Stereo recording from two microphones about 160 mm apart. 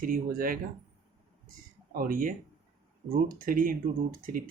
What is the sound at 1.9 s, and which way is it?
Speech, 65° right (ahead or behind).